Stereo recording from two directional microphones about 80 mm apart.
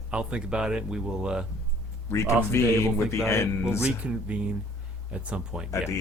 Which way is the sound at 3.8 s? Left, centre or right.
Centre.